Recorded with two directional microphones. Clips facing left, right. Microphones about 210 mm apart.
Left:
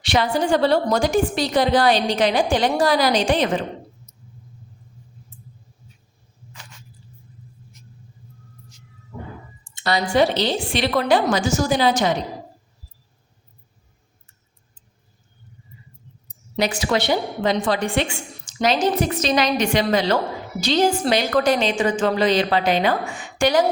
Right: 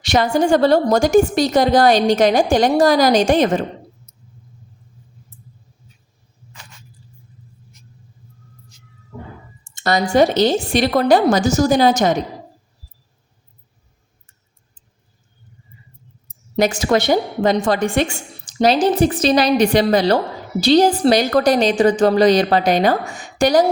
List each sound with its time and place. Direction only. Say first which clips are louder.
0.0 s a woman's voice: right 4 dB; 45° right (ahead or behind)
9.7 s a woman's voice: right 4 dB; 45° right (ahead or behind)
16.6 s a woman's voice: right 5 dB; 45° right (ahead or behind)